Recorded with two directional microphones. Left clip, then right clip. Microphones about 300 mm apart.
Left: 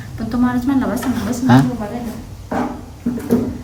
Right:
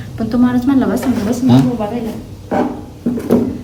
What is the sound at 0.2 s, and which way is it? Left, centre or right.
Speech, centre.